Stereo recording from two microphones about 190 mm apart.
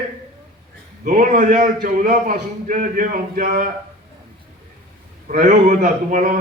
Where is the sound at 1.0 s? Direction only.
45° right (ahead or behind).